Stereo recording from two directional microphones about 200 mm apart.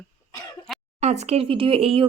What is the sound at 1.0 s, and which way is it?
Speech, 35° right (ahead or behind).